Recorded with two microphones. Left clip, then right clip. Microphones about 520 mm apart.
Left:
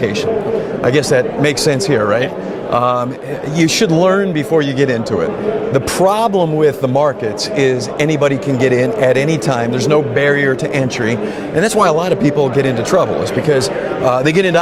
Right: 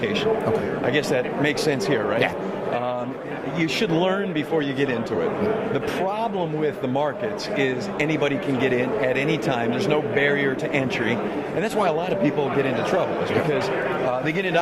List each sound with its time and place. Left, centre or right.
0.9 s speech: left
2.7 s a man's voice: left
3.6 s speech: left
5.7 s speech: left
14.1 s a man's voice: left